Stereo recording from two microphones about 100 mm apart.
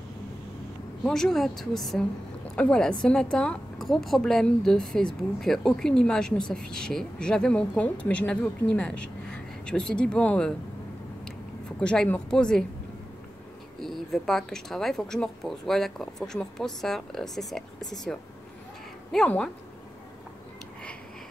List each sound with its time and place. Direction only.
1.0 s a woman's voice: 5° left (ahead or behind)
11.8 s a woman's voice: 10° left (ahead or behind)
13.7 s speech: centre (ahead or behind)
19.2 s a woman's voice: 10° left (ahead or behind)